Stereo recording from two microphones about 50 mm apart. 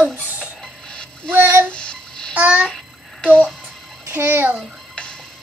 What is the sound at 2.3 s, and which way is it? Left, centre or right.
Babbling, right.